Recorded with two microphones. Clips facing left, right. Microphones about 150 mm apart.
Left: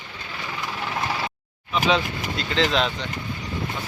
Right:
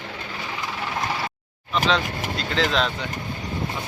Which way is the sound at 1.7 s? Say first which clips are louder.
Left 1 dB; 5° left (ahead or behind).